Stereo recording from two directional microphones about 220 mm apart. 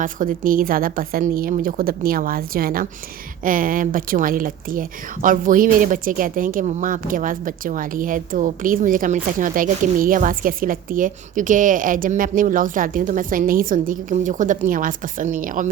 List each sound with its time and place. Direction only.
0.0 s speech: 40° right (ahead or behind)